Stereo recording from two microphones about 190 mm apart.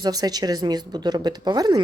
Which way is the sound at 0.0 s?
20° right (ahead or behind).